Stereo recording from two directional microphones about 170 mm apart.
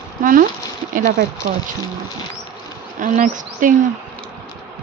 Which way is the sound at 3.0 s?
50° right (ahead or behind).